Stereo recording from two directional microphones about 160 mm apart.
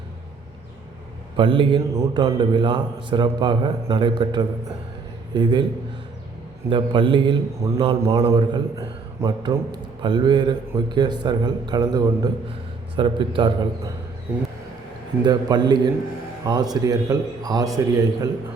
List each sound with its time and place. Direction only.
1.4 s a man's voice: 35° right (ahead or behind)
6.7 s a man's voice: 30° right (ahead or behind)
15.2 s a man's voice: 25° right (ahead or behind)